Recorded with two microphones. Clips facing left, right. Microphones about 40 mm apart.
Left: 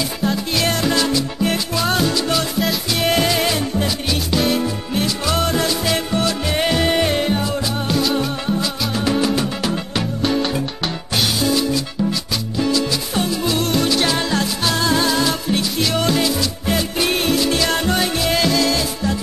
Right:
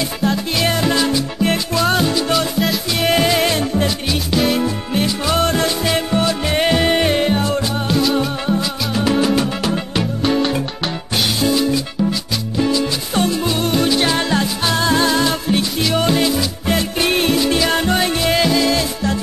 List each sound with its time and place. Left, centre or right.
0.2 s music: centre
2.3 s music: centre
4.1 s music: centre
4.6 s music: centre
5.4 s music: right
5.9 s music: centre
7.9 s music: centre